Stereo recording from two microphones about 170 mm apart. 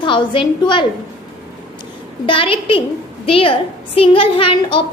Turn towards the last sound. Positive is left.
turn(degrees=30)  # may be behind; listen again after turning